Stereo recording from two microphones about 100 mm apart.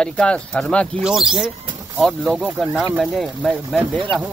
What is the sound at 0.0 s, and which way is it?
Speech, 10° left (ahead or behind).